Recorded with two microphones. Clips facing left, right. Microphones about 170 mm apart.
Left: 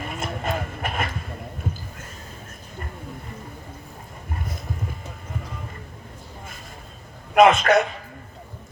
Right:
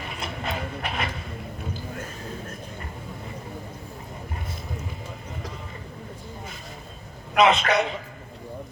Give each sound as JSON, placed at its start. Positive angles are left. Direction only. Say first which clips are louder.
{"t": 0.1, "sound": "vehicle", "louder": "left 4 dB", "side_deg": 50}
{"t": 7.3, "sound": "a man's voice", "louder": "left 4 dB", "side_deg": 50}